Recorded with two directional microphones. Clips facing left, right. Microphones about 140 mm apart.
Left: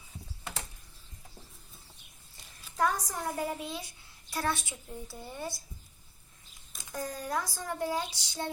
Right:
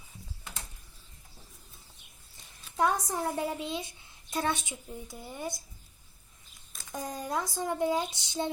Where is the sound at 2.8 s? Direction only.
25° right (ahead or behind).